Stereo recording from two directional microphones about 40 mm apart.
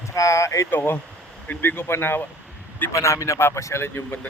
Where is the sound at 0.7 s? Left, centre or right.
Left.